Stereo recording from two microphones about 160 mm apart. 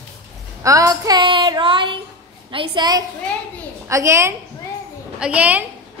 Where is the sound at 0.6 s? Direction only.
20° right (ahead or behind).